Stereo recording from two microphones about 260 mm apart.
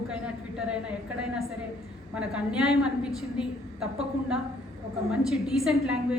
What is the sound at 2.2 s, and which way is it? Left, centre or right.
A woman's voice, centre.